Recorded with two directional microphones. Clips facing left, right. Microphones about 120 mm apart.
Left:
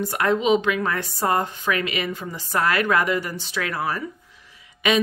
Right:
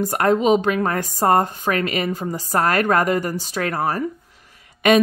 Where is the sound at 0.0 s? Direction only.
45° right (ahead or behind).